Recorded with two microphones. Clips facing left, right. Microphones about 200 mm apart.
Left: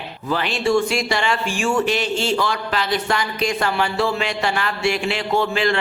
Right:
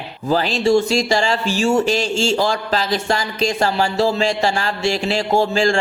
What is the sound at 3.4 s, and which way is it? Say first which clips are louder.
Speech: right 4 dB; 25° right (ahead or behind).